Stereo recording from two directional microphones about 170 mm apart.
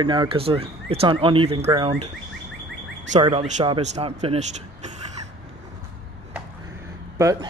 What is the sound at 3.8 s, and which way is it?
Speech, 40° right (ahead or behind).